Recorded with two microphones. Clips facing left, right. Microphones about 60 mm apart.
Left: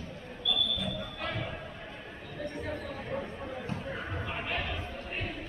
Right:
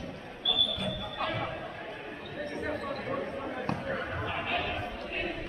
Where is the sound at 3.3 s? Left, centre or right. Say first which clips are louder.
Right 4 dB; right.